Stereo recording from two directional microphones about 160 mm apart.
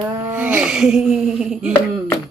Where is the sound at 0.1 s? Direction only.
15° right (ahead or behind).